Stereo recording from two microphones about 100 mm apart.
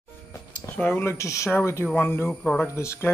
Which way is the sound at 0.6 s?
15° left (ahead or behind).